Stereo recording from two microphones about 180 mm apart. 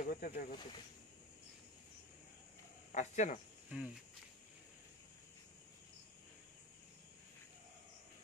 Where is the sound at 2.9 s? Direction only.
40° left (ahead or behind).